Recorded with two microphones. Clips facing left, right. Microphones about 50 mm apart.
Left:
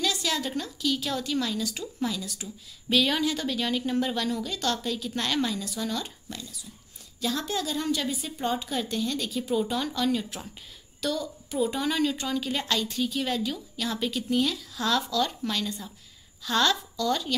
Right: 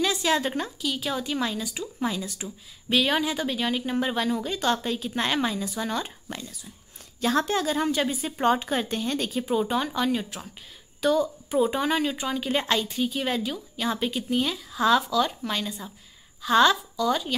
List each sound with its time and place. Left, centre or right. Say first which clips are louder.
0.0 s a woman's voice: right 4 dB; right
0.7 s a woman's voice: even; centre
2.0 s speech: right 3 dB; right
2.9 s a woman's voice: right 1 dB; centre; by 9.5 s right
9.5 s a woman's voice: right 2 dB; right